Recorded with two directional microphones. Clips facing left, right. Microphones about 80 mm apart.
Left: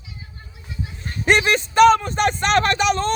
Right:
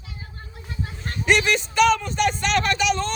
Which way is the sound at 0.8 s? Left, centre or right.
Right.